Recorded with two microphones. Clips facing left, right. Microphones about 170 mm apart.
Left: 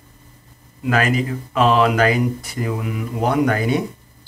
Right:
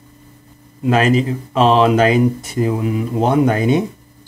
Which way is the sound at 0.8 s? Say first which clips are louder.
Right 5 dB; 25° right (ahead or behind).